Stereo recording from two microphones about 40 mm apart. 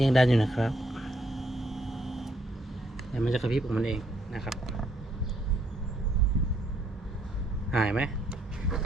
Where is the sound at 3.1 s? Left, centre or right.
Centre.